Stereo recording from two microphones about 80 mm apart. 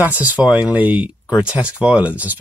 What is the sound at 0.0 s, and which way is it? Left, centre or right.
Speech, right.